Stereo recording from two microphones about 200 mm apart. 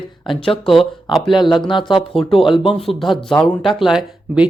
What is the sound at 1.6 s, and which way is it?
Speech, 25° left (ahead or behind).